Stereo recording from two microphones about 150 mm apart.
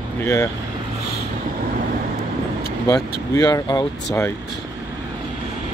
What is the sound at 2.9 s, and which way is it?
Speech, 25° left (ahead or behind).